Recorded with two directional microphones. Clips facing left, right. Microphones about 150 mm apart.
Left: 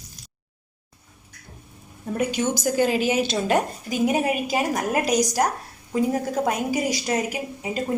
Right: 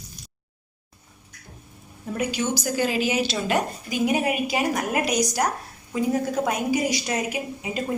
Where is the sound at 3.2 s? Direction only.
45° left (ahead or behind).